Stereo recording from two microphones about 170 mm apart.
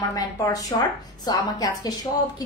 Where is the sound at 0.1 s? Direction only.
20° left (ahead or behind).